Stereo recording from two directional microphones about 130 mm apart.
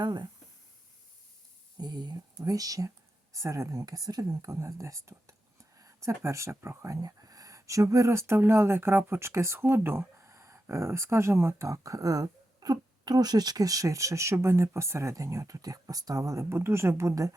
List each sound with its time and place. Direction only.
0.0 s speech: 35° right (ahead or behind)
1.8 s speech: 35° right (ahead or behind)